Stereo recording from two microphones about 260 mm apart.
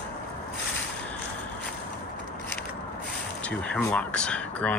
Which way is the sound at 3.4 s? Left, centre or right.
Centre.